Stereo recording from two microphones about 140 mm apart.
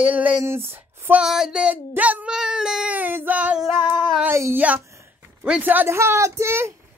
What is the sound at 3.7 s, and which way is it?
Female singing, 35° left (ahead or behind).